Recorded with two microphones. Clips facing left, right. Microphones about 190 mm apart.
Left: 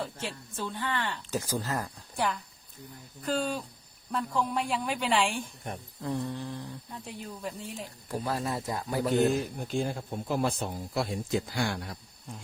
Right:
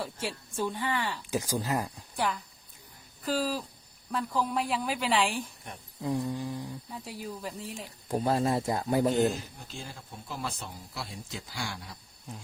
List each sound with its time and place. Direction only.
0.0 s speech: 10° right (ahead or behind)
2.1 s speech: centre (ahead or behind)
6.0 s speech: 10° right (ahead or behind)
8.0 s a man's voice: 25° right (ahead or behind)
9.4 s speech: 55° left (ahead or behind)